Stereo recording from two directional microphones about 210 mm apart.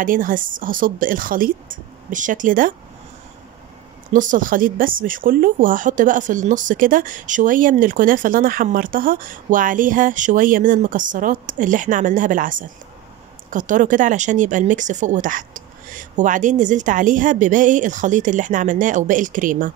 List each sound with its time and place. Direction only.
0.0 s speech: 40° right (ahead or behind)
4.1 s speech: 40° right (ahead or behind)